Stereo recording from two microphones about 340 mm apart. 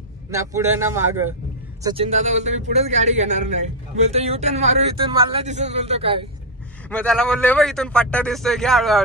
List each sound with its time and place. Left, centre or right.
0.3 s a man's voice: centre
6.9 s a man's voice: centre